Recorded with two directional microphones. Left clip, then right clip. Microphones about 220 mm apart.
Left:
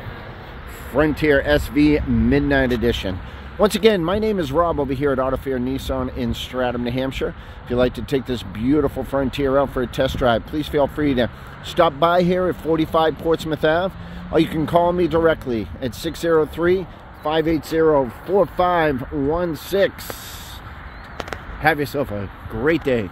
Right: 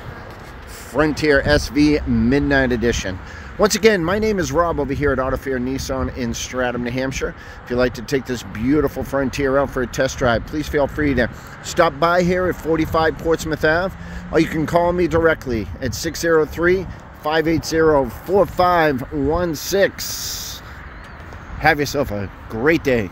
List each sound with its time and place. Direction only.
0.9 s speech: 10° right (ahead or behind)
21.5 s speech: 15° right (ahead or behind)